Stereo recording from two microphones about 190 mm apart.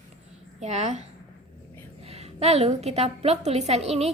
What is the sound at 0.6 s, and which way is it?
Speech, 35° right (ahead or behind).